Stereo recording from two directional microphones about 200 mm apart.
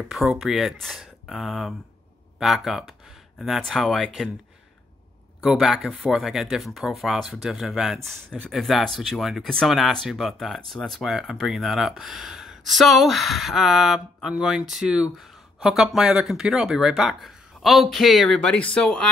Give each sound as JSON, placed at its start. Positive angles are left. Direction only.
{"t": 0.1, "sound": "speech", "side_deg": 0}
{"t": 5.4, "sound": "speech", "side_deg": 0}